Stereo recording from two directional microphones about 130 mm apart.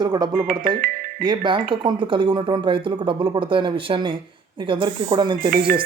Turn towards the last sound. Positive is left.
turn(degrees=-40)  # may be behind; listen again after turning